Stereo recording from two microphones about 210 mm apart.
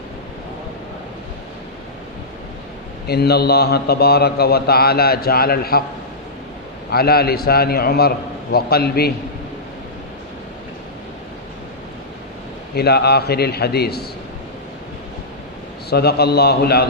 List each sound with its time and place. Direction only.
3.1 s a man's voice: 50° left (ahead or behind)
6.9 s a man's voice: 45° left (ahead or behind)
12.7 s a man's voice: 50° left (ahead or behind)
15.9 s a man's voice: 50° left (ahead or behind)